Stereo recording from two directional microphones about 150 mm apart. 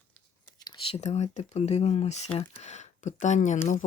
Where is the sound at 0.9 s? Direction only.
45° left (ahead or behind).